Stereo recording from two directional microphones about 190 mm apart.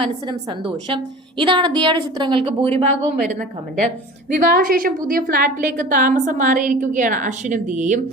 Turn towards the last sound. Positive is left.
turn(degrees=-40)  # may be behind; listen again after turning